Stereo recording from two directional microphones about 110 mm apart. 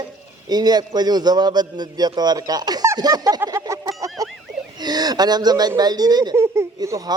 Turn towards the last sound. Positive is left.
turn(degrees=-35)  # may be behind; listen again after turning